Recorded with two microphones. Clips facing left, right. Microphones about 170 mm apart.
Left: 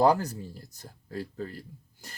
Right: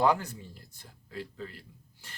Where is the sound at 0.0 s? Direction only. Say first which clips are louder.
Left 4 dB; 40° left (ahead or behind).